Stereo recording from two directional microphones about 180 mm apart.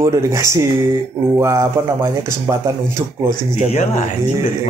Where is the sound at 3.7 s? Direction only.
35° left (ahead or behind).